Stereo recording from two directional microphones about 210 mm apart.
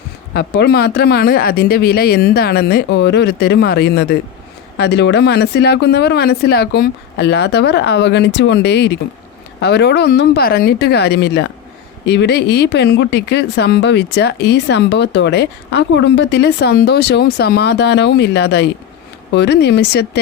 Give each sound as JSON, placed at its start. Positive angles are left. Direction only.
{"t": 0.3, "sound": "speech", "side_deg": 50}